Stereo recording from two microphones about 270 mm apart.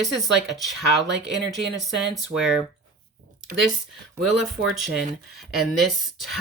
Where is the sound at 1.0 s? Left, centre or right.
Right.